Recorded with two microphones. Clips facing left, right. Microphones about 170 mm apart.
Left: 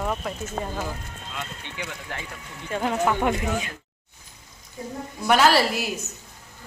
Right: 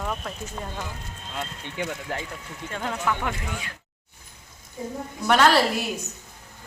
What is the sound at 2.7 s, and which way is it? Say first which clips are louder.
Speech: left 5 dB; 15° left (ahead or behind).